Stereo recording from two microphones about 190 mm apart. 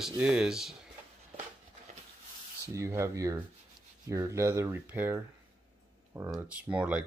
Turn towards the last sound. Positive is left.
turn(degrees=-5)  # may be behind; listen again after turning